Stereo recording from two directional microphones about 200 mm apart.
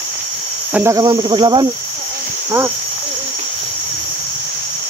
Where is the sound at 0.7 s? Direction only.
15° right (ahead or behind).